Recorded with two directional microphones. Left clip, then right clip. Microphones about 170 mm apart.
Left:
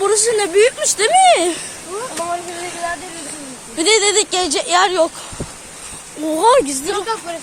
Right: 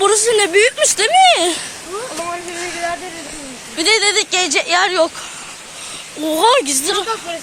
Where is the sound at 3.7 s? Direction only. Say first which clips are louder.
Even; 25° left (ahead or behind).